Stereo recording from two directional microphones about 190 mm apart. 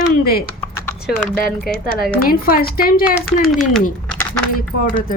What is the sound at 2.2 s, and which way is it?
Speech, 50° left (ahead or behind).